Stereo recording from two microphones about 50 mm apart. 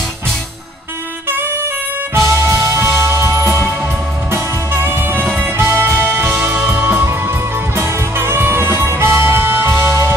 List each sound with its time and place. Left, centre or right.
2.1 s music: right
4.3 s music: right
5.2 s music: right
5.6 s music: right
7.0 s music: right